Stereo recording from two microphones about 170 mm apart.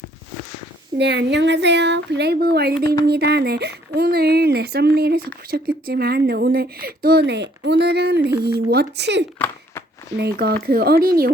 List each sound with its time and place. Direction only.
0.9 s speech: 80° right
10.2 s speech: 70° right (ahead or behind)